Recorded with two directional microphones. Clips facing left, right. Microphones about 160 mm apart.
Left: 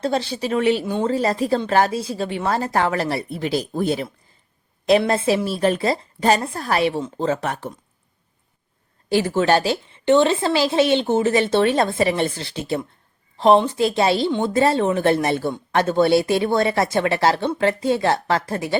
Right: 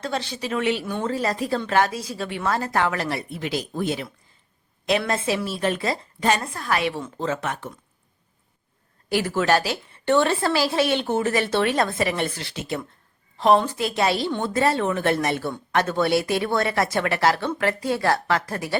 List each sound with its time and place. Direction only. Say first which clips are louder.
0.0 s a woman's voice: left 6 dB; 35° left (ahead or behind)
9.0 s a woman's voice: left 3 dB; 25° left (ahead or behind)